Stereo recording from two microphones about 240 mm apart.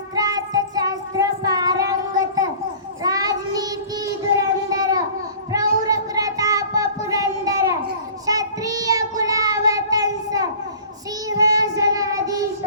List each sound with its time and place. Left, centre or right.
0.2 s child singing: centre